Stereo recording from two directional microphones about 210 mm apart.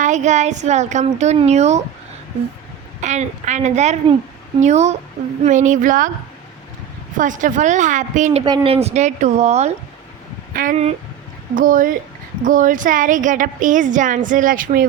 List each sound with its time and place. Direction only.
0.0 s a woman's voice: 35° right (ahead or behind)
3.0 s a woman's voice: 35° right (ahead or behind)
7.2 s a woman's voice: 40° right (ahead or behind)